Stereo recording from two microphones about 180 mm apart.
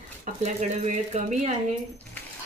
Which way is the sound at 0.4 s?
40° right (ahead or behind).